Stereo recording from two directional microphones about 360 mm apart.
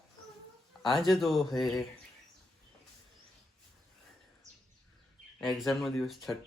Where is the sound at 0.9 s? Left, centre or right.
Centre.